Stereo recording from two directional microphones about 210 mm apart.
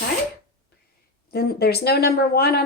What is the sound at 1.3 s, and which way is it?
Speech, 50° left (ahead or behind).